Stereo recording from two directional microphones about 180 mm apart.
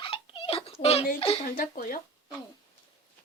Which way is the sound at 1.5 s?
50° left (ahead or behind).